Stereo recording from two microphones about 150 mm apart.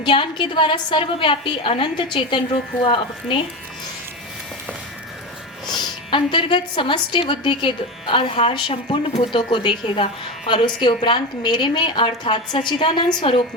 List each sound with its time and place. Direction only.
0.0 s a woman's voice: 30° left (ahead or behind)
5.6 s a woman's voice: 30° left (ahead or behind)